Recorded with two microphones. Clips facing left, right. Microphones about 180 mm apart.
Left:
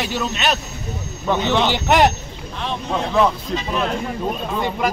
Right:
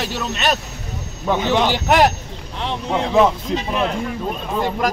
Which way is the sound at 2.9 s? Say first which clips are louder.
Right 3 dB; 15° right (ahead or behind).